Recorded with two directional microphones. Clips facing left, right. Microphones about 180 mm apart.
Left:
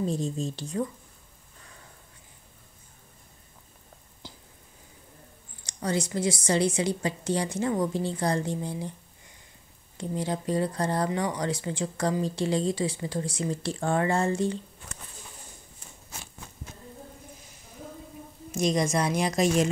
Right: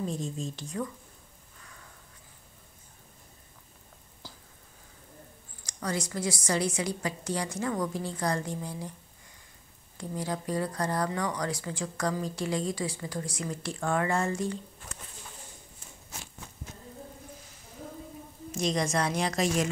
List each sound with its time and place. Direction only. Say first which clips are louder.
0.0 s a woman's voice: left 5 dB; 35° left (ahead or behind)
5.6 s speech: left 4 dB; 25° left (ahead or behind)
9.9 s speech: left 3 dB; 25° left (ahead or behind)
18.5 s a woman's voice: left 3 dB; 15° left (ahead or behind)